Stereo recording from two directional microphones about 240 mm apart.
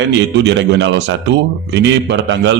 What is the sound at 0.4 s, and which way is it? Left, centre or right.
A man's voice, right.